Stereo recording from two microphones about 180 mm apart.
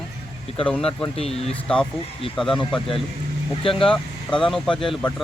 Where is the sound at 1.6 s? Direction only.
5° left (ahead or behind).